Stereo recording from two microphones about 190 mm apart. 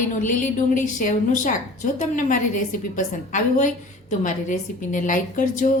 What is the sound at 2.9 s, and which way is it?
A woman's voice, 40° left (ahead or behind).